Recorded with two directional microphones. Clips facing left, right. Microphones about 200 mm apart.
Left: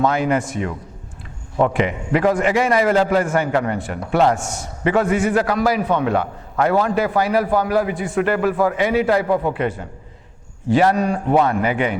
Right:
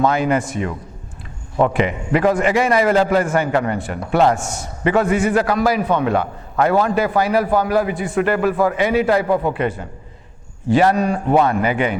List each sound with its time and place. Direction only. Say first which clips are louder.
0.0 s a man's voice: right 1 dB; 15° right (ahead or behind)
4.2 s a man's voice: right 1 dB; 25° right (ahead or behind)
4.4 s a man's voice: right 1 dB; 10° right (ahead or behind)